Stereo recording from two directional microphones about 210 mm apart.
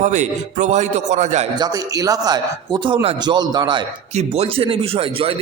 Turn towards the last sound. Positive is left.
turn(degrees=-25)  # may be behind; listen again after turning